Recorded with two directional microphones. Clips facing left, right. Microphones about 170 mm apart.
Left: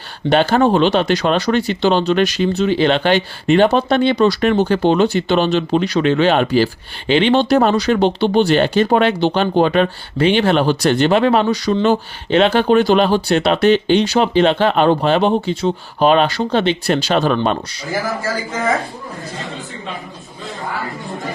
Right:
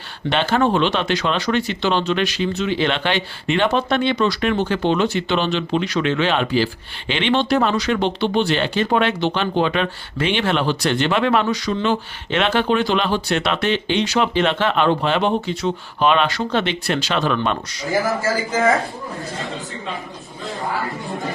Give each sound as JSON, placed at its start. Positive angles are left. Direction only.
{"t": 0.3, "sound": "speech", "side_deg": 40}